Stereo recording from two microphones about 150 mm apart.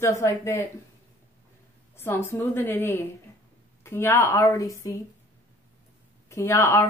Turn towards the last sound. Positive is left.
turn(degrees=20)  # may be behind; listen again after turning